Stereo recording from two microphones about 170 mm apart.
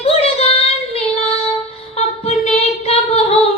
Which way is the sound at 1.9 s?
40° left (ahead or behind).